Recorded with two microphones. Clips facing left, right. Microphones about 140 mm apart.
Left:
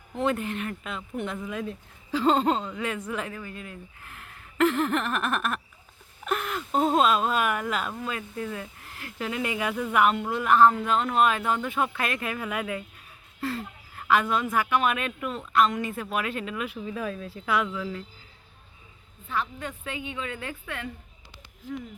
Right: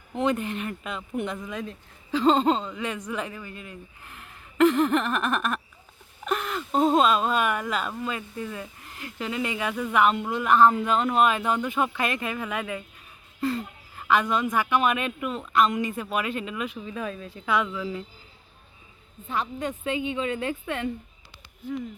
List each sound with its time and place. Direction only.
0.1 s speech: centre (ahead or behind)
19.3 s a woman's voice: 20° right (ahead or behind)
21.6 s speech: 90° left